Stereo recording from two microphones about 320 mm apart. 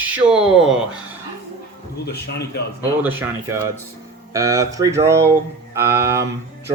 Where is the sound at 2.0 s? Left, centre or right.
Left.